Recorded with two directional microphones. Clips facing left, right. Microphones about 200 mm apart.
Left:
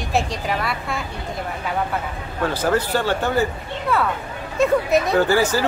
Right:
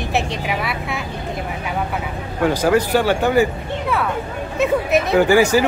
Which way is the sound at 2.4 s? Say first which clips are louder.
Right 4 dB; 15° right (ahead or behind).